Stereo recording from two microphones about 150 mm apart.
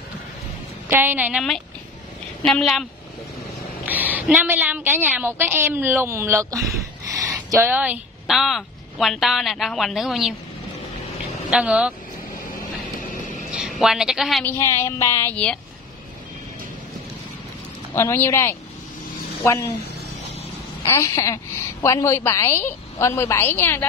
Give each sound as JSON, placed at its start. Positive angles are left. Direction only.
{"t": 0.8, "sound": "a woman's voice", "side_deg": -15}
{"t": 2.4, "sound": "a woman's voice", "side_deg": 5}
{"t": 3.8, "sound": "a woman's voice", "side_deg": -10}
{"t": 11.5, "sound": "a woman's voice", "side_deg": -10}
{"t": 13.5, "sound": "a woman's voice", "side_deg": 0}
{"t": 14.4, "sound": "a woman's voice", "side_deg": 15}
{"t": 17.9, "sound": "a woman's voice", "side_deg": 15}
{"t": 20.8, "sound": "a woman's voice", "side_deg": 20}